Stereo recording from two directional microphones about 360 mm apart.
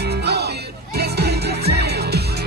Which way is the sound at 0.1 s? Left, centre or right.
Right.